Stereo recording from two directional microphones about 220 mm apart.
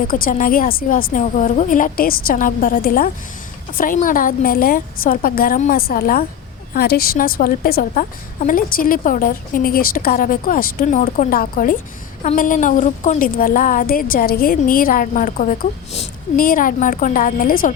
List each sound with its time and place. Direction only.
0.1 s a woman's voice: 40° left (ahead or behind)